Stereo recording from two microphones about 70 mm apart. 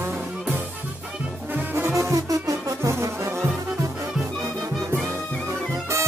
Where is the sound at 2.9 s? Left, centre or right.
Right.